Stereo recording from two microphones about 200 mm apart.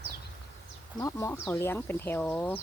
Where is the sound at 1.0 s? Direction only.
15° left (ahead or behind).